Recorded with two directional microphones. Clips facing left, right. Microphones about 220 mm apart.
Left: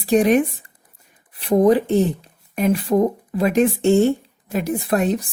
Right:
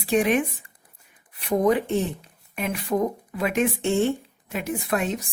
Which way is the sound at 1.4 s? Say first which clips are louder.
Left 6 dB; 30° left (ahead or behind).